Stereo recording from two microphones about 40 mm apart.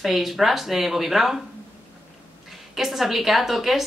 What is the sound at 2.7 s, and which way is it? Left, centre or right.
Speech, centre.